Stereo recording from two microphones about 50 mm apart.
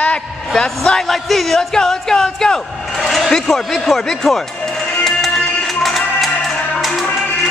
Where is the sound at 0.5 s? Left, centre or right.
Centre.